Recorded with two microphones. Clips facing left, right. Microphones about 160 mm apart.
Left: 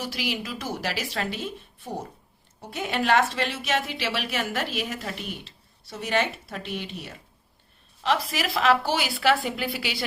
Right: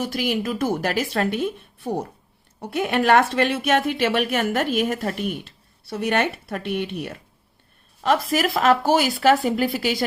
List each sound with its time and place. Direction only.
0.0 s a woman's voice: 50° right (ahead or behind)
8.0 s speech: 50° right (ahead or behind)